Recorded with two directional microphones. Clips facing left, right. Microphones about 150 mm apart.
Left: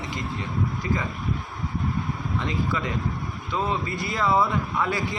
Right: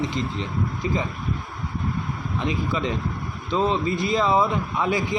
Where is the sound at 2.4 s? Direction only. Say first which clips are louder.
Right 3 dB; 20° right (ahead or behind).